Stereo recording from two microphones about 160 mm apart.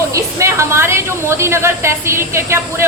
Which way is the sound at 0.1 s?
20° right (ahead or behind).